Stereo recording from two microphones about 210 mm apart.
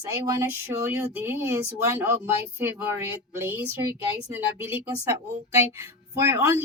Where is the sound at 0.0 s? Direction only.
15° right (ahead or behind).